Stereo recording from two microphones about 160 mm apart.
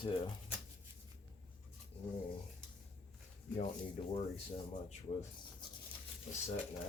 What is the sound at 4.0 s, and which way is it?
Speech, 40° left (ahead or behind).